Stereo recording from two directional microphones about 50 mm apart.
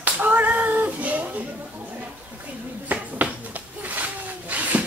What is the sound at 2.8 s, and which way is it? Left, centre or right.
Finger snapping, right.